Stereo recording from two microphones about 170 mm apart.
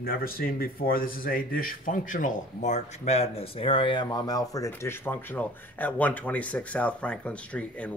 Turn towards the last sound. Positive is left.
turn(degrees=5)  # may be behind; listen again after turning